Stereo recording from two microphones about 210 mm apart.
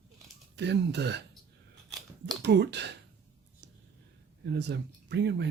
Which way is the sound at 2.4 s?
55° right (ahead or behind).